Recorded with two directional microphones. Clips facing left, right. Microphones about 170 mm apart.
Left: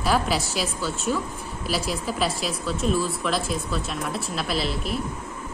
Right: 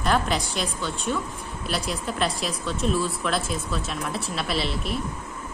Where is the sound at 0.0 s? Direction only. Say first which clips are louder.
Left 1 dB; 5° left (ahead or behind).